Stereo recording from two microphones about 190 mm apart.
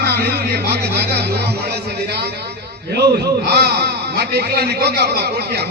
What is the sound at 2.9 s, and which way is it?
A man's voice, 60° right (ahead or behind).